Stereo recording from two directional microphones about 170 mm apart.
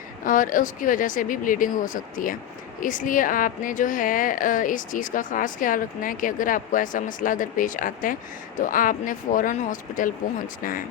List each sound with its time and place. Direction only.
0.3 s a woman's voice: 50° left (ahead or behind)